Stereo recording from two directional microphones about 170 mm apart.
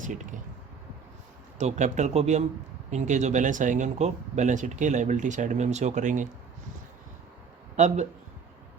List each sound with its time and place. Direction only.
0.0 s speech: 50° right (ahead or behind)
1.5 s speech: 45° right (ahead or behind)
7.8 s speech: 45° right (ahead or behind)